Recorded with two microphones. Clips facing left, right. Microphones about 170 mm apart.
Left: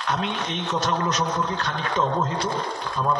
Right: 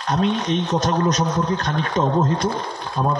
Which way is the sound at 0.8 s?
40° right (ahead or behind).